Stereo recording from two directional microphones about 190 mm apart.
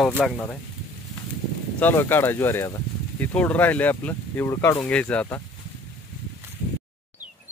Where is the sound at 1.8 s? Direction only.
10° left (ahead or behind).